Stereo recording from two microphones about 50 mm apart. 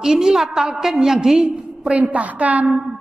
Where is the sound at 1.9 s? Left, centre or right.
Right.